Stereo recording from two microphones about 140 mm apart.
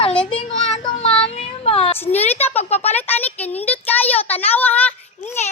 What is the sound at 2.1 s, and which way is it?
Speech, 50° left (ahead or behind).